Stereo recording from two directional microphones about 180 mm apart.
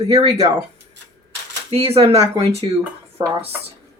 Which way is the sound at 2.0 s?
35° right (ahead or behind).